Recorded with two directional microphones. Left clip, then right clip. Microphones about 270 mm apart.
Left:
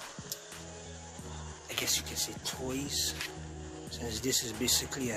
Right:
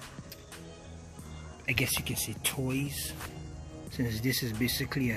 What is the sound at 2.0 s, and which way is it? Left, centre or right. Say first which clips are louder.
Speech: even; left.